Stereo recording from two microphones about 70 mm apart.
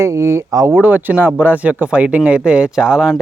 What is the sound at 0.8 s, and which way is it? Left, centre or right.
Speech, right.